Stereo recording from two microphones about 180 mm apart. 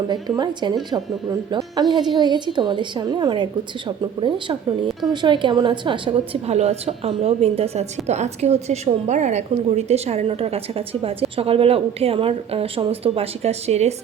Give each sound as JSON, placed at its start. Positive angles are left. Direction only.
{"t": 0.1, "sound": "a woman's voice", "side_deg": -25}